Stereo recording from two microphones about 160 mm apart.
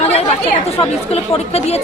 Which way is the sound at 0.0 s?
40° left (ahead or behind).